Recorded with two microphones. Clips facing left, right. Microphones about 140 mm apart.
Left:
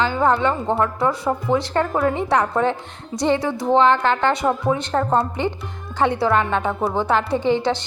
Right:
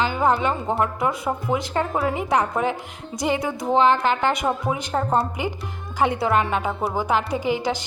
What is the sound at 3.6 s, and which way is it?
A woman's voice, 10° right (ahead or behind).